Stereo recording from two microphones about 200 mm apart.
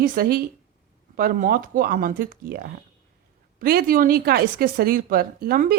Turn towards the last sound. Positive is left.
turn(degrees=-45)  # may be behind; listen again after turning